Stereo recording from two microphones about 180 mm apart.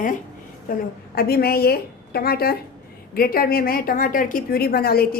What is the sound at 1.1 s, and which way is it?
A woman's voice, 60° left (ahead or behind).